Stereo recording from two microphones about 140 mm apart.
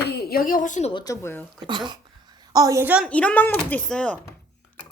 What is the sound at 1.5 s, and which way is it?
A woman's voice, 35° right (ahead or behind).